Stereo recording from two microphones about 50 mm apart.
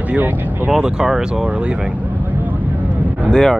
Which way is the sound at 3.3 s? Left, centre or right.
Centre.